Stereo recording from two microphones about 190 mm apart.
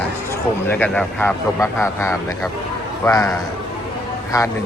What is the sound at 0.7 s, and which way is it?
Speech, 10° left (ahead or behind).